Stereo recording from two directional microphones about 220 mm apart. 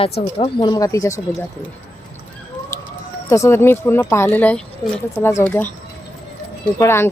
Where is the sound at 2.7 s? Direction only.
15° left (ahead or behind).